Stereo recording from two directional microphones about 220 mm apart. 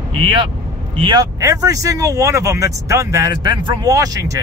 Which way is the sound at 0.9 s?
20° right (ahead or behind).